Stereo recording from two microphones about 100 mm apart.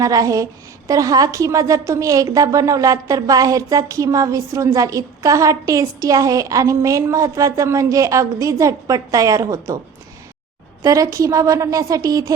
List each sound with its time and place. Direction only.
0.0 s a woman's voice: 35° right (ahead or behind)
10.8 s a woman's voice: 35° right (ahead or behind)